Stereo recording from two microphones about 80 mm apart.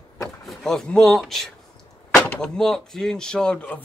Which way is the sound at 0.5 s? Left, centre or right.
Centre.